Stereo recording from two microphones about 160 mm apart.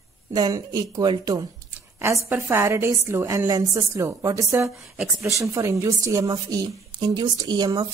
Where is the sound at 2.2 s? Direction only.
10° right (ahead or behind).